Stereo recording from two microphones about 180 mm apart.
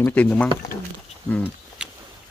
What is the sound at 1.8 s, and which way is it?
Boat, 5° right (ahead or behind).